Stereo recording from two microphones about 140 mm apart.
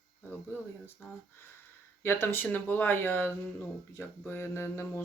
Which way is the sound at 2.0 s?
15° left (ahead or behind).